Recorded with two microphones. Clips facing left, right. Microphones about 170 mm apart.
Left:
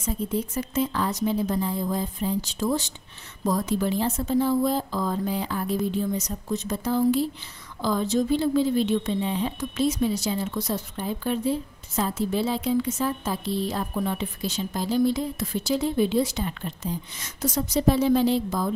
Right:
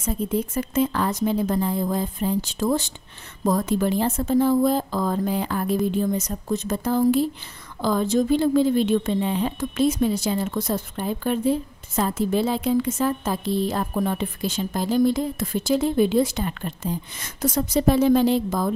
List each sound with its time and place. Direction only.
0.0 s a woman's voice: 55° right (ahead or behind)